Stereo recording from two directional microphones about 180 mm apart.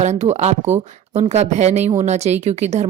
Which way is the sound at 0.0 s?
40° right (ahead or behind).